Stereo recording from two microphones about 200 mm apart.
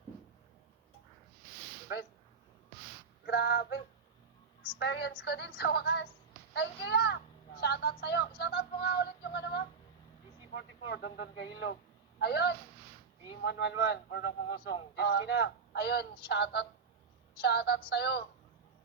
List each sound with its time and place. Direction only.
3.2 s female singing: 55° left (ahead or behind)
4.8 s a man's voice: 55° left (ahead or behind)